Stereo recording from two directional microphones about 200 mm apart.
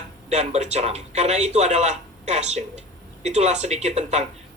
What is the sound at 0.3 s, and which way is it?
Speech, 35° right (ahead or behind).